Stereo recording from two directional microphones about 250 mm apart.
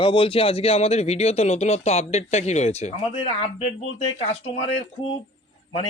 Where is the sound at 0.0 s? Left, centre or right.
Left.